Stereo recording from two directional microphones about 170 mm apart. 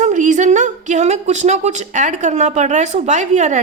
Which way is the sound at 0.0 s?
45° right (ahead or behind).